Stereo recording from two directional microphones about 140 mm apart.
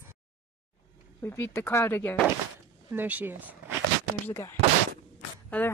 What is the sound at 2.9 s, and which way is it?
Speech, 10° right (ahead or behind).